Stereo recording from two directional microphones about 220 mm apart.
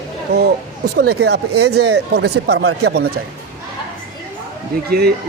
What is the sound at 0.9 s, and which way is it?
Speech, 50° right (ahead or behind).